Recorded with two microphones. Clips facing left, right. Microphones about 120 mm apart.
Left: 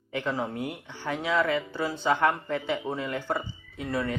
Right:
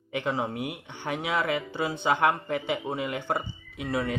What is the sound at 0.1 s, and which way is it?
Speech, 20° right (ahead or behind).